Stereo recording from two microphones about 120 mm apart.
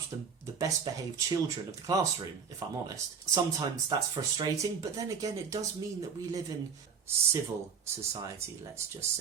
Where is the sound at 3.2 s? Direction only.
25° right (ahead or behind).